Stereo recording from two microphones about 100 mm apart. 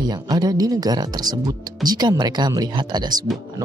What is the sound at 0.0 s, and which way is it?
Speech, 40° right (ahead or behind).